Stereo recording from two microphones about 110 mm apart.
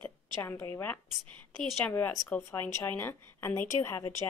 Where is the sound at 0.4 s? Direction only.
25° left (ahead or behind).